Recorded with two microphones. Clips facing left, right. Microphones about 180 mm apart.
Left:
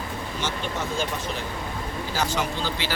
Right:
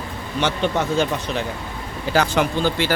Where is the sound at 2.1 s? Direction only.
65° right (ahead or behind).